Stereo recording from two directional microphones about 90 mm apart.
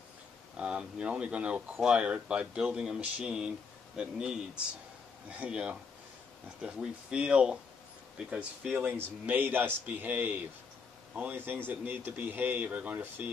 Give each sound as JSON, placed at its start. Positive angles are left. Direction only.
{"t": 0.6, "sound": "a man's voice", "side_deg": -10}